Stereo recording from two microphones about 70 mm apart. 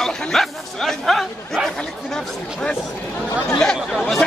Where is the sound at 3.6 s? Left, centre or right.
Centre.